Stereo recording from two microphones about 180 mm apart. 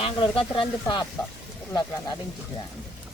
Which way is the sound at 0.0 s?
30° left (ahead or behind).